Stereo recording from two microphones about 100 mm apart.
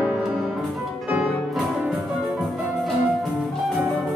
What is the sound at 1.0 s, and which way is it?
Music, 15° right (ahead or behind).